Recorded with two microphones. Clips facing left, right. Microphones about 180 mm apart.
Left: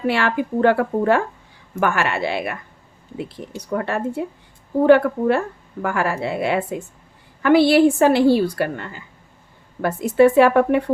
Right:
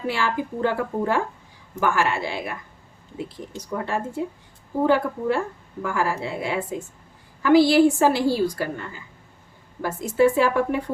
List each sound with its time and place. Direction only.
0.1 s a woman's voice: 65° left (ahead or behind)
3.7 s a woman's voice: 65° left (ahead or behind)